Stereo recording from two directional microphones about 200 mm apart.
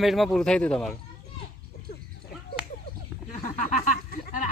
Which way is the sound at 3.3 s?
40° left (ahead or behind).